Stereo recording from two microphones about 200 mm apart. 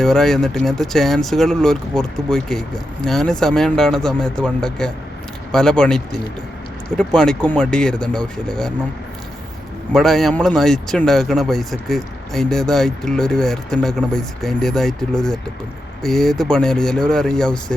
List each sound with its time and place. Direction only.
0.0 s speech: centre (ahead or behind)
9.9 s speech: centre (ahead or behind)